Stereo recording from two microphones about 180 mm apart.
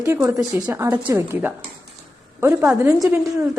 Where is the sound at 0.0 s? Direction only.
15° right (ahead or behind).